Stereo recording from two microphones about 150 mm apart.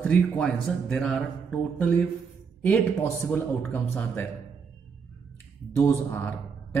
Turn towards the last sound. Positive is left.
turn(degrees=15)  # may be behind; listen again after turning